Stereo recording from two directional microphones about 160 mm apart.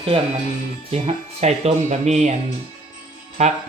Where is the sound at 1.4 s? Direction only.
45° right (ahead or behind).